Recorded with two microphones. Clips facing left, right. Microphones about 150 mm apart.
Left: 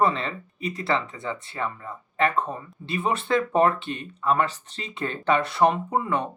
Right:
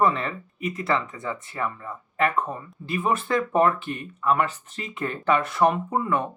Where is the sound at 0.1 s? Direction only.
30° left (ahead or behind).